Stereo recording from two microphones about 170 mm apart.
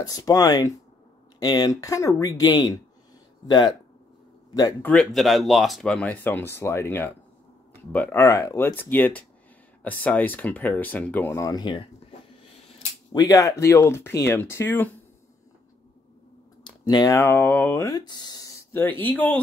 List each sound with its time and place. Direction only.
0.0 s speech: 20° left (ahead or behind)
4.8 s speech: centre (ahead or behind); by 11.8 s 25° left (ahead or behind)
13.1 s speech: 20° left (ahead or behind)
16.8 s speech: 20° left (ahead or behind)
17.8 s speech: 25° left (ahead or behind)